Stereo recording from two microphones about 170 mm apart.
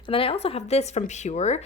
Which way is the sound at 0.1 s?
35° left (ahead or behind).